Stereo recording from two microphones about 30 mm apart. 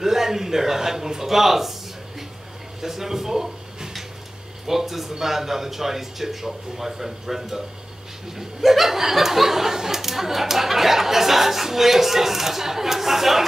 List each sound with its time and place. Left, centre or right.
0.0 s a man's voice: centre